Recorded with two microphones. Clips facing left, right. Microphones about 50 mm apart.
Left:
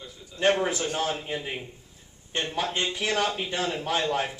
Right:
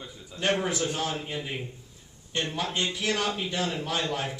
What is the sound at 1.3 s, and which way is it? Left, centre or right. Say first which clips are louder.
A man's voice: left 1 dB; centre.